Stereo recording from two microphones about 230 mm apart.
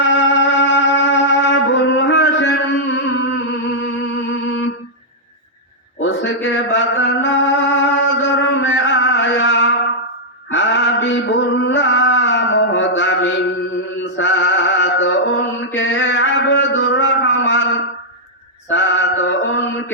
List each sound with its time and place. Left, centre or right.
0.0 s music: left
6.0 s music: left
10.5 s male singing: left
14.2 s music: left
18.7 s mantra: left